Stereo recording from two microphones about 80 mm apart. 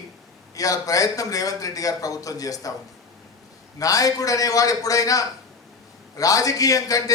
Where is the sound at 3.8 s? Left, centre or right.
Left.